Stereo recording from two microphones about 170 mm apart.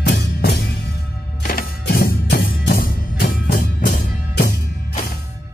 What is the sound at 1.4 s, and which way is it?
Music, 60° left (ahead or behind).